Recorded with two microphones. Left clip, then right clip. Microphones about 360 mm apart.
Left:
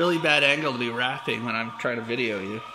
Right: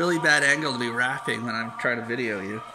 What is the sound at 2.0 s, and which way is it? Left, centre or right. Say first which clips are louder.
Speech: left 1 dB; left.